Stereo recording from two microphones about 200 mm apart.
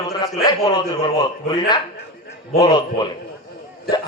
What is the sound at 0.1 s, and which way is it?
A man's voice, 20° left (ahead or behind).